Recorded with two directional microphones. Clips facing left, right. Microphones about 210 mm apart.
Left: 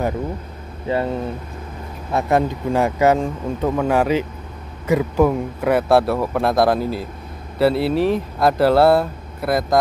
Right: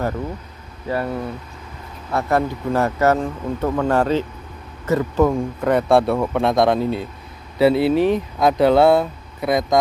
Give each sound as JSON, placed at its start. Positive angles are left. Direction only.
{"t": 0.8, "sound": "speech", "side_deg": 20}